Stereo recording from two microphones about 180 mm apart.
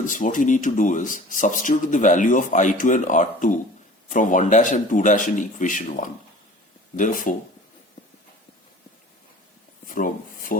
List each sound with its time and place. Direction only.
0.0 s speech: 45° left (ahead or behind)
9.8 s speech: 50° left (ahead or behind)